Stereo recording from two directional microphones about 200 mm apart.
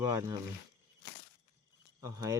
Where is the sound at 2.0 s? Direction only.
15° right (ahead or behind).